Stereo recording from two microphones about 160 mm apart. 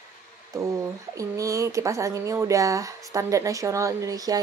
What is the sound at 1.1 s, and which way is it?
Speech, 20° right (ahead or behind).